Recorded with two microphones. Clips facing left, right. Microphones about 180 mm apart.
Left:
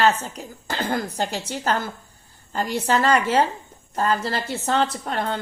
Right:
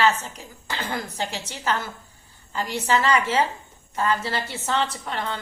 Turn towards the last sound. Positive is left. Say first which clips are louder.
# left 4 dB
turn(degrees=45)  # may be behind; listen again after turning